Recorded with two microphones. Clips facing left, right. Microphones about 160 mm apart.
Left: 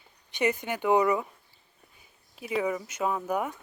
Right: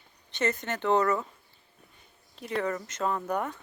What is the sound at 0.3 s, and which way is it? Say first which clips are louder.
Speech: left 2 dB; 15° left (ahead or behind).